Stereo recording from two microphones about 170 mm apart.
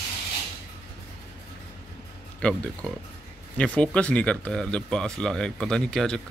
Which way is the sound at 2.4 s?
5° left (ahead or behind).